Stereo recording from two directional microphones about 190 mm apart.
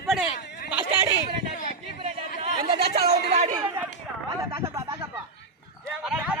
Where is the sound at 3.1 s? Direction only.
35° right (ahead or behind).